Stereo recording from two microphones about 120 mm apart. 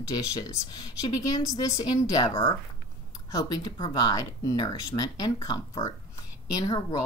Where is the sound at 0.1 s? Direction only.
35° left (ahead or behind).